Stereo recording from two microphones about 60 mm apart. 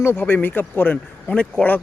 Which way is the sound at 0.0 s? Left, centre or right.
Left.